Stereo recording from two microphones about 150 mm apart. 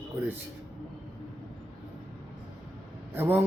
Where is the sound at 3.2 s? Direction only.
15° right (ahead or behind).